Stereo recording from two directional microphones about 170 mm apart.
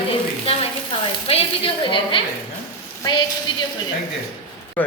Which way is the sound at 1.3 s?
30° left (ahead or behind).